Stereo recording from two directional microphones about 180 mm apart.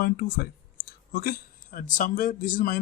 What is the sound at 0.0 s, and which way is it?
Speech, 60° left (ahead or behind).